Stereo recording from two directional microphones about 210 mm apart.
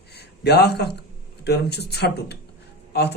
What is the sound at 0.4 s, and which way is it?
Speech, 50° left (ahead or behind).